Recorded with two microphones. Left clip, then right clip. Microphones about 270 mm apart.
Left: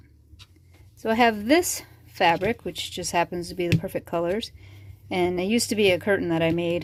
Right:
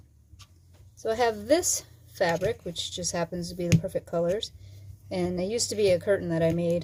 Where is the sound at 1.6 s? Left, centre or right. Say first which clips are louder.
Left 3 dB; left.